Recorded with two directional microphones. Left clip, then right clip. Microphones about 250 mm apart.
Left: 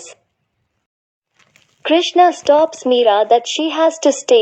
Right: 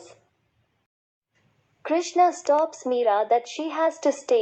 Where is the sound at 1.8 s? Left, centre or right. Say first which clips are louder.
Left 9 dB; left.